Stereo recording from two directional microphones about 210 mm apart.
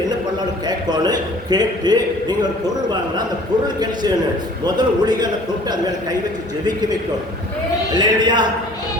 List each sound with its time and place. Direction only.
0.7 s a man's voice: 20° right (ahead or behind)
4.6 s a man's voice: 20° right (ahead or behind)
7.9 s a man's voice: 20° right (ahead or behind)